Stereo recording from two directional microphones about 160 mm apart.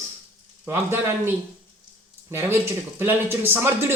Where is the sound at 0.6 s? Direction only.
15° right (ahead or behind).